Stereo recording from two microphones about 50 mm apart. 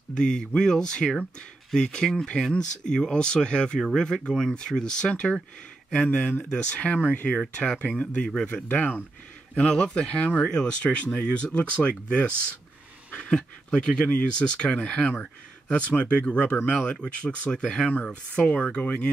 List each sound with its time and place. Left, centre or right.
0.1 s speech: centre
6.0 s speech: left
7.2 s speech: left
8.6 s speech: left
9.6 s speech: centre